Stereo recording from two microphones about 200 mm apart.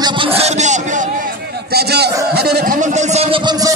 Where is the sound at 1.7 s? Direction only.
55° right (ahead or behind).